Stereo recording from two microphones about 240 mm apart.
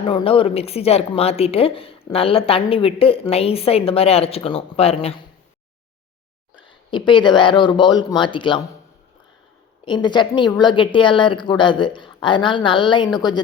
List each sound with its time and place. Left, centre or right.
0.0 s a woman's voice: left
6.9 s a woman's voice: centre
9.8 s a woman's voice: centre